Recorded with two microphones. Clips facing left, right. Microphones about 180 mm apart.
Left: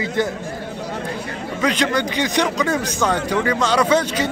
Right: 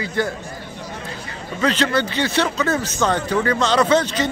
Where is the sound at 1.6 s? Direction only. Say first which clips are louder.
Right 1 dB; 10° left (ahead or behind).